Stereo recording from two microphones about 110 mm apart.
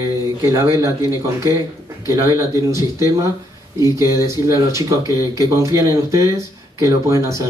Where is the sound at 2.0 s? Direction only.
30° right (ahead or behind).